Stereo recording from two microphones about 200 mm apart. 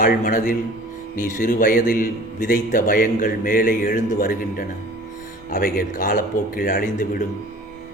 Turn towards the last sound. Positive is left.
turn(degrees=40)  # may be behind; listen again after turning